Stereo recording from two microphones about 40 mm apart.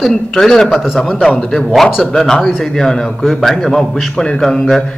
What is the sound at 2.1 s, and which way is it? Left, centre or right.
A man's voice, centre.